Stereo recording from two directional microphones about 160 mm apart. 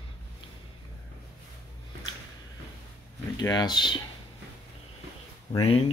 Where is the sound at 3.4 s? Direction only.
25° left (ahead or behind).